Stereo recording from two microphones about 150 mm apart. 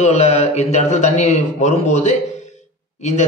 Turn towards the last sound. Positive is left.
turn(degrees=50)  # may be behind; listen again after turning